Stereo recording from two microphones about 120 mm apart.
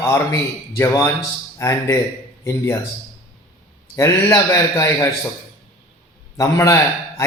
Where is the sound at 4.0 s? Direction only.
20° left (ahead or behind).